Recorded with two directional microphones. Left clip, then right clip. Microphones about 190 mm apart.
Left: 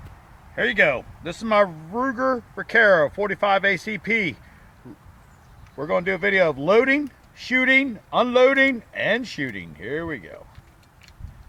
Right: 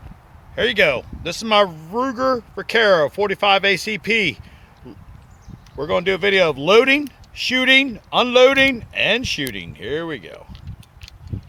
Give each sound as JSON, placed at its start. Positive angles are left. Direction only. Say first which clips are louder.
{"t": 0.5, "sound": "speech", "louder": "right 3 dB", "side_deg": -30}
{"t": 1.2, "sound": "speech", "louder": "right 3 dB", "side_deg": -20}
{"t": 5.7, "sound": "speech", "louder": "right 3 dB", "side_deg": -20}